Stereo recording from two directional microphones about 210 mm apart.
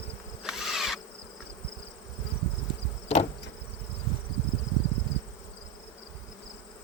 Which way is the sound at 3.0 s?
30° left (ahead or behind).